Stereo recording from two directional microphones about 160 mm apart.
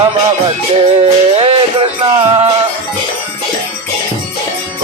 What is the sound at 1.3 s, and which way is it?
Music, 35° right (ahead or behind).